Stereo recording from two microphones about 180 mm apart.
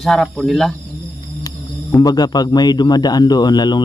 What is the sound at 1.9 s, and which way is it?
A man's voice, 20° left (ahead or behind).